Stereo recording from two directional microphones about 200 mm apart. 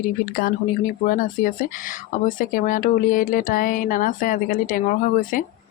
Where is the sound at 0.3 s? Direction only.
45° left (ahead or behind).